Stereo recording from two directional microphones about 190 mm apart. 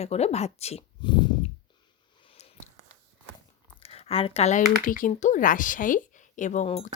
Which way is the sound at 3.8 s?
30° left (ahead or behind).